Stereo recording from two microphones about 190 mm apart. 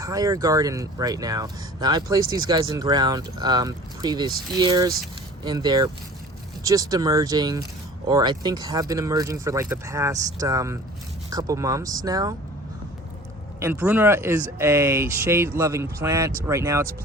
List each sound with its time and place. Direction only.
0.0 s speech: 20° right (ahead or behind)
13.6 s speech: 10° right (ahead or behind)